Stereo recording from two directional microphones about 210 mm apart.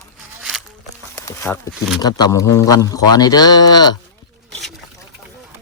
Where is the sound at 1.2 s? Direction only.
15° left (ahead or behind).